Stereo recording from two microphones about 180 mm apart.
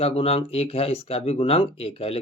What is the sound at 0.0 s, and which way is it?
Speech, 35° left (ahead or behind).